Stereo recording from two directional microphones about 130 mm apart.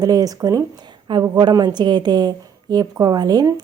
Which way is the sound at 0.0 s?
30° right (ahead or behind).